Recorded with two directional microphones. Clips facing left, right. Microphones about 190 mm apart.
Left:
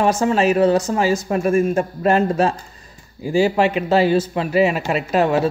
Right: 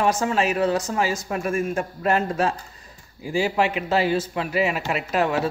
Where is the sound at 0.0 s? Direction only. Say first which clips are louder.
Left 5 dB; 30° left (ahead or behind).